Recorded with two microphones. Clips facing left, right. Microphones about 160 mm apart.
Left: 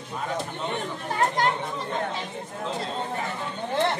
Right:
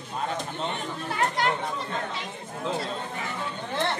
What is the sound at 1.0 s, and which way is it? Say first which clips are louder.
Chatter: left 2 dB; 40° left (ahead or behind).